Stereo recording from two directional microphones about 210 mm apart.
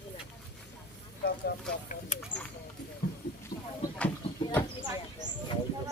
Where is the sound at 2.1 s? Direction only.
35° left (ahead or behind).